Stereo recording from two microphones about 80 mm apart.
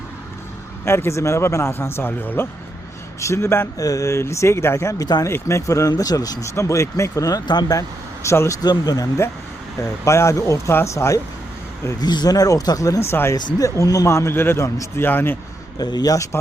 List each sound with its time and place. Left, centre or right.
0.9 s a man's voice: left
3.2 s a man's voice: left
3.8 s a man's voice: left
7.4 s speech: left
7.8 s speech: left
8.6 s speech: left
10.0 s a man's voice: left
11.9 s speech: left
13.3 s a man's voice: left
15.8 s speech: left
16.3 s a man's voice: left